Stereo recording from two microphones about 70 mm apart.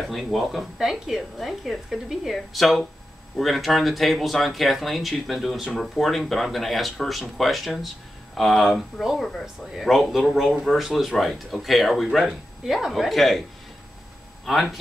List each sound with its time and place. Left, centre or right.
0.1 s speech: centre
14.4 s speech: centre